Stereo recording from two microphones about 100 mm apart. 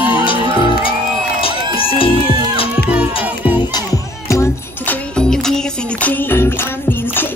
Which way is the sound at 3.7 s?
30° left (ahead or behind).